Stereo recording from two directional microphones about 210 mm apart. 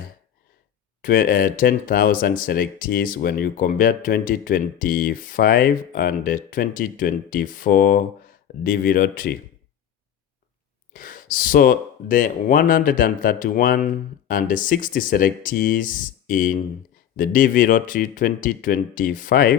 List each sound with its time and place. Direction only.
1.0 s speech: 45° left (ahead or behind)
10.9 s speech: 40° left (ahead or behind)